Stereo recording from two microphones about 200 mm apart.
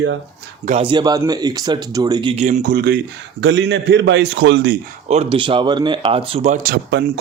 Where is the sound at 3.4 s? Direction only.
60° right (ahead or behind).